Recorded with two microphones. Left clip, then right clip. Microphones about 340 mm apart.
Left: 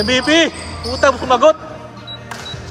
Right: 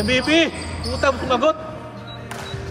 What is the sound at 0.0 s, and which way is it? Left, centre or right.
A man's voice, left.